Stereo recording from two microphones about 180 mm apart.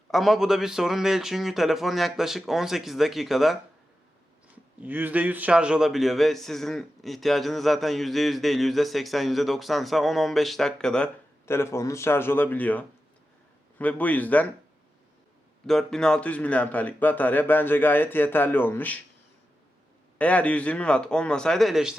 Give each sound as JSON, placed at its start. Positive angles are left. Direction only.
{"t": 0.1, "sound": "a man's voice", "side_deg": 0}
{"t": 4.8, "sound": "a man's voice", "side_deg": -10}
{"t": 15.6, "sound": "a man's voice", "side_deg": 0}
{"t": 20.1, "sound": "a man's voice", "side_deg": 5}